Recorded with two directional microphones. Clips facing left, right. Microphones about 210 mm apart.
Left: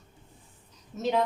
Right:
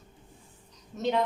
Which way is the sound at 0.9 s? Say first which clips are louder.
Even; centre (ahead or behind).